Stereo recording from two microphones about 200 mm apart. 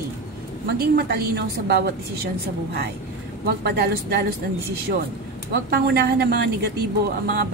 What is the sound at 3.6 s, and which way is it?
Speech, 55° right (ahead or behind).